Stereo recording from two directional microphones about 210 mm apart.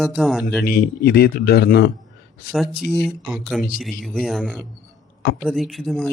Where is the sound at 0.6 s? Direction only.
45° left (ahead or behind).